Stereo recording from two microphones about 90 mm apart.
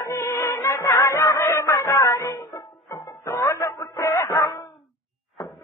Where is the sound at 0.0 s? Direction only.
30° left (ahead or behind).